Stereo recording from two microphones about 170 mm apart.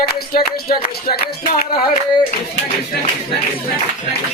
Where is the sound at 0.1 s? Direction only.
60° left (ahead or behind).